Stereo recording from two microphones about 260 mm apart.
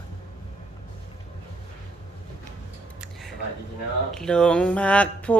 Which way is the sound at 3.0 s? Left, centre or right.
Centre.